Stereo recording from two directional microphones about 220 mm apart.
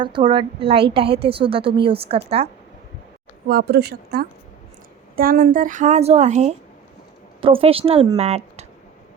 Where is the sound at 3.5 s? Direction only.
45° right (ahead or behind).